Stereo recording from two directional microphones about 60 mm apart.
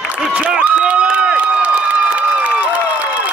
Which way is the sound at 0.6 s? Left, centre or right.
Centre.